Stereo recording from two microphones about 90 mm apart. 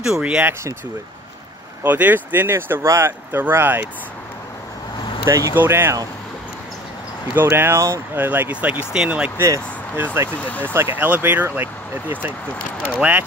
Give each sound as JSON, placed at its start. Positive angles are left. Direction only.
{"t": 0.0, "sound": "speech", "side_deg": -10}
{"t": 1.8, "sound": "speech", "side_deg": -20}
{"t": 5.2, "sound": "speech", "side_deg": -40}
{"t": 5.5, "sound": "speech", "side_deg": -25}
{"t": 7.3, "sound": "speech", "side_deg": -25}
{"t": 9.9, "sound": "speech", "side_deg": -20}